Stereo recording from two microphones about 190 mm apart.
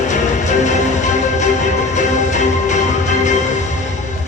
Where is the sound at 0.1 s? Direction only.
40° left (ahead or behind).